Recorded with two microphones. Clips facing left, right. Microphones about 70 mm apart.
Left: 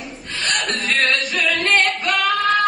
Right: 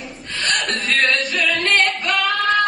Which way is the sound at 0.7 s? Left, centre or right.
Centre.